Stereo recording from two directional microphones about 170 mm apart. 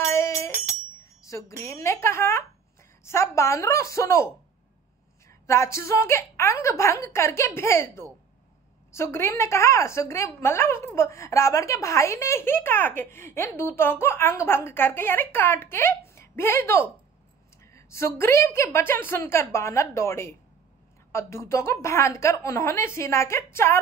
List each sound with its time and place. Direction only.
0.0 s jingle bell: 15° left (ahead or behind)
1.0 s wind chime: 20° left (ahead or behind)
1.6 s speech: 15° left (ahead or behind)
5.5 s a woman's voice: 15° left (ahead or behind)